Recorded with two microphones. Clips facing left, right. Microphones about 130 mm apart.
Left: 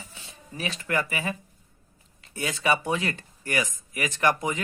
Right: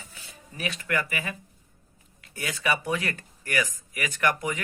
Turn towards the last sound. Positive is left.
turn(degrees=25)  # may be behind; listen again after turning